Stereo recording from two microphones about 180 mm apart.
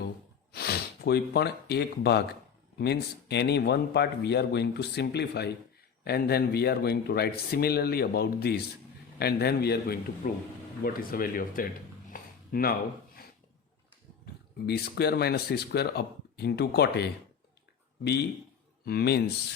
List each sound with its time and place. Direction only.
0.5 s speech: 60° left (ahead or behind)
12.1 s a sound: 55° left (ahead or behind)
14.7 s speech: 65° left (ahead or behind)